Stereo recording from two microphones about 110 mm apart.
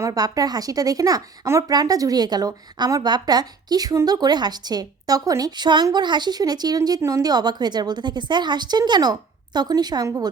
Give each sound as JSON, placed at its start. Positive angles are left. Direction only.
{"t": 0.0, "sound": "speech", "side_deg": -35}